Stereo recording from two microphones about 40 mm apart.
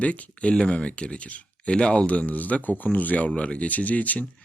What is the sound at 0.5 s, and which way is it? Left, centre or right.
Speech, left.